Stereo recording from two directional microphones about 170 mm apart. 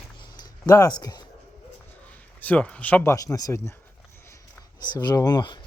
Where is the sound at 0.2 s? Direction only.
25° left (ahead or behind).